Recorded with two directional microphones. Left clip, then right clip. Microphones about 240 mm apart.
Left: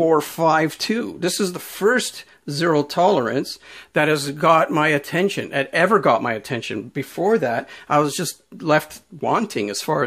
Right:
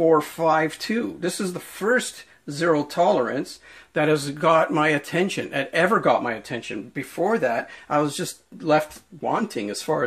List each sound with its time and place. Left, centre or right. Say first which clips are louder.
0.0 s speech: left 2 dB; left
3.9 s speech: left 3 dB; left